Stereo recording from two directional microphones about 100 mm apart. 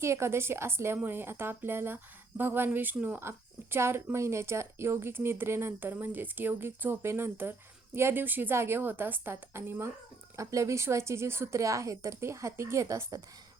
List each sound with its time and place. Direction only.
0.0 s speech: 25° right (ahead or behind)